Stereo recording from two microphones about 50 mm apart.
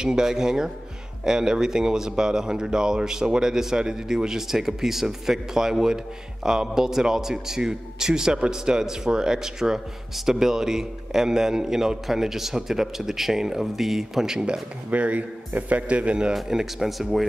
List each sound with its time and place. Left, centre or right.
0.0 s a man's voice: centre
14.9 s a man's voice: right
16.3 s speech: centre